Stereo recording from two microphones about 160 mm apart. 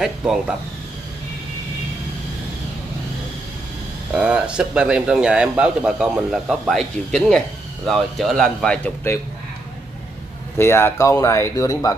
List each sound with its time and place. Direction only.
0.0 s a man's voice: 5° right (ahead or behind)
4.1 s a man's voice: 5° right (ahead or behind); by 9.2 s 10° left (ahead or behind)
10.6 s speech: 15° left (ahead or behind)